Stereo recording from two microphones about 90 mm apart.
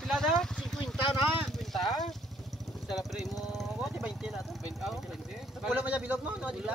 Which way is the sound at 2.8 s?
Centre (ahead or behind).